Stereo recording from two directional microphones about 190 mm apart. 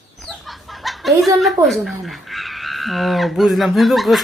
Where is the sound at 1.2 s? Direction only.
Centre (ahead or behind).